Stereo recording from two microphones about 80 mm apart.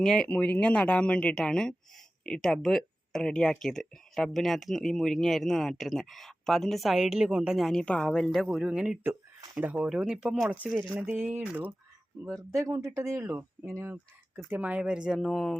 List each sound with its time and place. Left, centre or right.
0.0 s speech: centre
7.6 s speech: centre
8.4 s speech: centre
11.1 s speech: right
12.3 s speech: right
14.6 s speech: centre